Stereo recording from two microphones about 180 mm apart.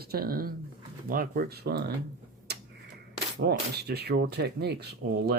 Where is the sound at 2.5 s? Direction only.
65° right (ahead or behind).